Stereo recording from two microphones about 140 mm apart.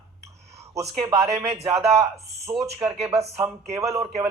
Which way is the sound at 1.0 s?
20° right (ahead or behind).